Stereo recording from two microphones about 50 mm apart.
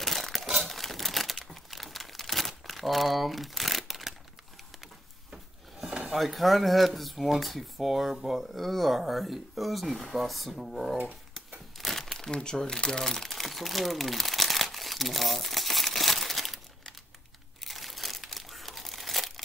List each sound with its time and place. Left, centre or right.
0.0 s crumpling: centre
5.3 s wood: centre
6.1 s speech: centre
11.8 s crumpling: centre